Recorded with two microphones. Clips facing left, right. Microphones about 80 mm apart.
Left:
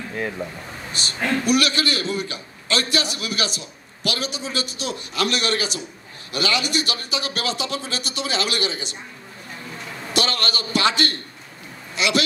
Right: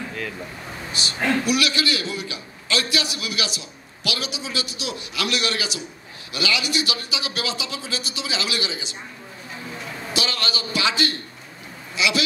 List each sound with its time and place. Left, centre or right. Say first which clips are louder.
0.9 s a man's voice: right 1 dB; left
10.1 s speech: left 3 dB; left